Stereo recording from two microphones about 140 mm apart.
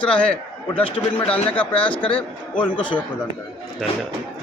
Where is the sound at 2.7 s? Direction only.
35° left (ahead or behind).